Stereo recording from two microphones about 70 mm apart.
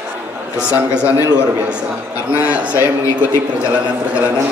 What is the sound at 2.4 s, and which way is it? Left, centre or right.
Speech, right.